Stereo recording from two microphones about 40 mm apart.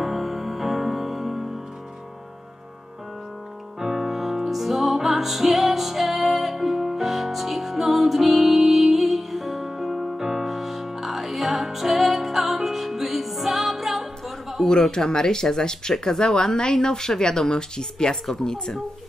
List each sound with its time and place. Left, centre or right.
0.0 s music: centre
3.8 s music: centre
14.7 s speech: centre